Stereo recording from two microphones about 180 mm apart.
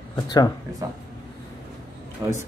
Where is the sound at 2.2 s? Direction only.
15° right (ahead or behind).